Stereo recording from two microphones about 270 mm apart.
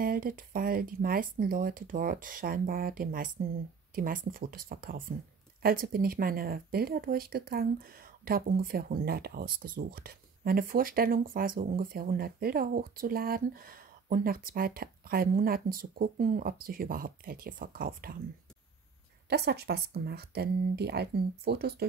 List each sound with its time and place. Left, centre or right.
0.0 s speech: right
19.2 s speech: right